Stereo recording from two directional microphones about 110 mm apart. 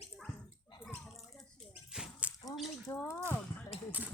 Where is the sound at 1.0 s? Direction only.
Centre (ahead or behind).